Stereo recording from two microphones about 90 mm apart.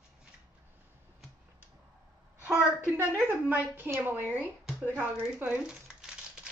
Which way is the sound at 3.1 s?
25° right (ahead or behind).